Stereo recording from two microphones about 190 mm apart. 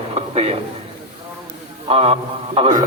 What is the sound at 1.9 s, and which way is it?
Speech, 30° right (ahead or behind).